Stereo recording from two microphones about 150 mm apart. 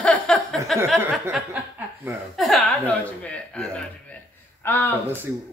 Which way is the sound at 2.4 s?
Centre (ahead or behind).